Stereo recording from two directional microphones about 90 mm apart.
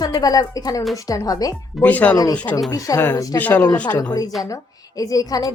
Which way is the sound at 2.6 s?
45° left (ahead or behind).